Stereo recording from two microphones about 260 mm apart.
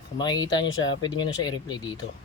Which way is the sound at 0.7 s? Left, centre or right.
Left.